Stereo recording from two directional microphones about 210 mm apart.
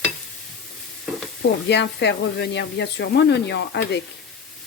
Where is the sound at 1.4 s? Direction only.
55° left (ahead or behind).